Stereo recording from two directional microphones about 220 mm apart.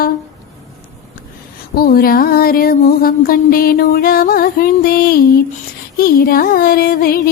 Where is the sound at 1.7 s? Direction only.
45° left (ahead or behind).